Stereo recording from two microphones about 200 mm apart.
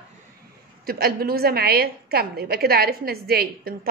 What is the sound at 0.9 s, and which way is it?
A woman's voice, 50° right (ahead or behind).